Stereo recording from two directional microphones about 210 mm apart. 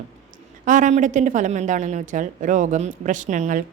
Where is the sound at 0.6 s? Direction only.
35° right (ahead or behind).